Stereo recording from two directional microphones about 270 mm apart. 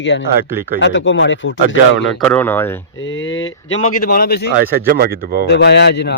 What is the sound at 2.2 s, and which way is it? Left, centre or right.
Speech, centre.